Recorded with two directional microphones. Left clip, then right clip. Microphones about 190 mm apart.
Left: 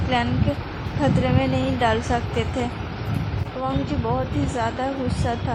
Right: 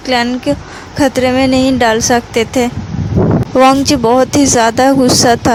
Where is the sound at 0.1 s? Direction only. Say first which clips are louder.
Right 10 dB; 50° right (ahead or behind).